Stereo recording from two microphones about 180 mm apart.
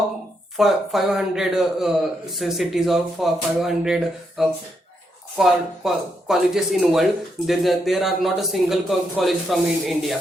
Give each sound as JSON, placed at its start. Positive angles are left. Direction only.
{"t": 0.5, "sound": "speech", "side_deg": 0}